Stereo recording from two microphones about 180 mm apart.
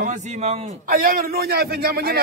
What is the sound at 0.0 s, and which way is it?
Speech, 40° right (ahead or behind).